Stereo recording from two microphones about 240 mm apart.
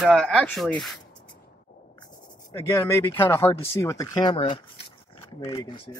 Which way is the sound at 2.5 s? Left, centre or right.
Centre.